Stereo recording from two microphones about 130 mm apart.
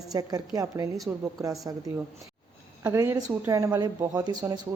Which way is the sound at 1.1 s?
10° right (ahead or behind).